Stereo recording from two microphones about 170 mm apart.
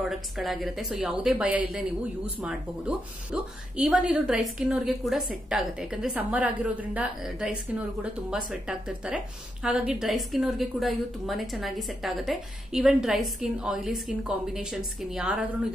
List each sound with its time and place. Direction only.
0.0 s speech: centre (ahead or behind)